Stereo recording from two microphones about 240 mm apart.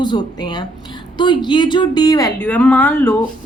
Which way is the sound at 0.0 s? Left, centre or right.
Centre.